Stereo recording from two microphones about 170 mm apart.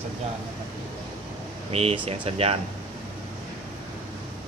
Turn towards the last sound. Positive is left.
turn(degrees=-35)  # may be behind; listen again after turning